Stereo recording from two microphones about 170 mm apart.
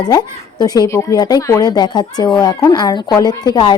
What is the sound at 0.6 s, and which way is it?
A woman's voice, 25° left (ahead or behind).